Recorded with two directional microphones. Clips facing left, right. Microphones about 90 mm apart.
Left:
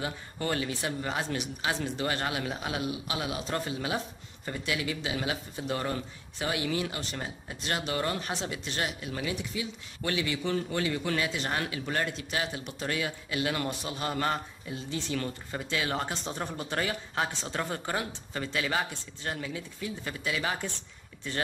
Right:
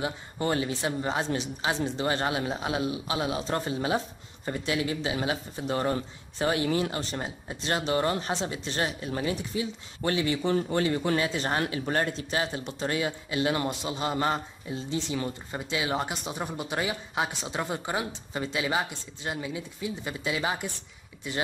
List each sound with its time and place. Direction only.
0.0 s speech: 25° right (ahead or behind)